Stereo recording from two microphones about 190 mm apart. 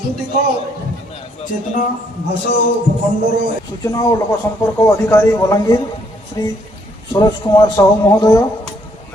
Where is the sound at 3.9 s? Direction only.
20° left (ahead or behind).